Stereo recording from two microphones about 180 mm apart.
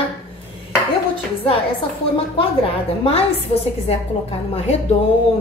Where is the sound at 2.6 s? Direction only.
30° left (ahead or behind).